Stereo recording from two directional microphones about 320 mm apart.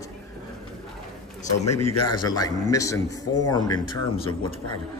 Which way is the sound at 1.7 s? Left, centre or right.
Left.